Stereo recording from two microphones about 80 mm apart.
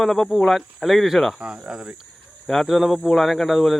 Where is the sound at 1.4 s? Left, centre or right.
Centre.